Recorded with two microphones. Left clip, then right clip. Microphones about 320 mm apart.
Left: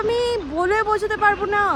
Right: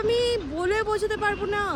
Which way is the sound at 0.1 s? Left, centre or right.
Centre.